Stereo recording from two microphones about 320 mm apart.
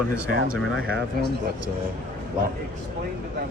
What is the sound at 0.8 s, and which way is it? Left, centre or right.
Speech, right.